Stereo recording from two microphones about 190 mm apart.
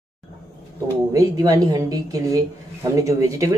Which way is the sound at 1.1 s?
20° right (ahead or behind).